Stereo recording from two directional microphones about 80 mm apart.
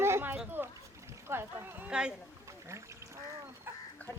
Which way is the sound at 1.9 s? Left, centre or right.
Centre.